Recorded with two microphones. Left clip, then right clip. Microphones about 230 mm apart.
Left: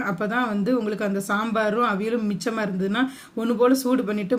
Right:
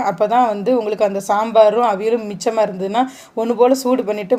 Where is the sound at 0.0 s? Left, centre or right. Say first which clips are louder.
Right 10 dB; right.